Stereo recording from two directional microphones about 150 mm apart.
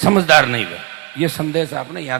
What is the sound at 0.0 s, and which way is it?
A man's voice, 10° right (ahead or behind).